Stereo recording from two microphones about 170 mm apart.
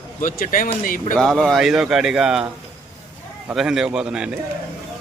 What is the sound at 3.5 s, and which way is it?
Speech, 5° right (ahead or behind).